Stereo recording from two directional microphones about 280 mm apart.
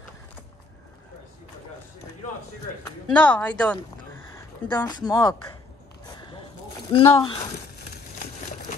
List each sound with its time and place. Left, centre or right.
2.8 s a woman's voice: centre
6.9 s speech: centre